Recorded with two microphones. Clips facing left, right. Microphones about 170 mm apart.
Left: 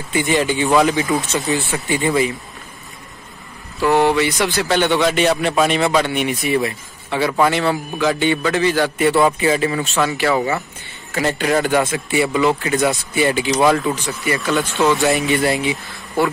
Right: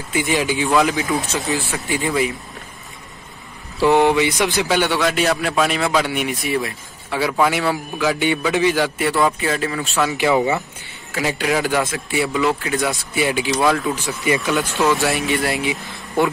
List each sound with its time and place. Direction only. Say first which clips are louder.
0.1 s a man's voice: left 2 dB; 5° right (ahead or behind)
3.8 s a man's voice: right 1 dB; 15° right (ahead or behind)
9.2 s a man's voice: left 3 dB; 5° left (ahead or behind)
10.1 s speech: right 4 dB; 15° right (ahead or behind)
11.1 s a man's voice: left 2 dB; centre (ahead or behind)